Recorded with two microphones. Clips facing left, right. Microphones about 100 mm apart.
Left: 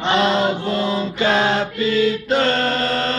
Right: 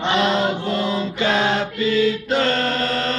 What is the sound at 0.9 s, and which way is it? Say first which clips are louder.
Mantra: left 3 dB; 35° left (ahead or behind).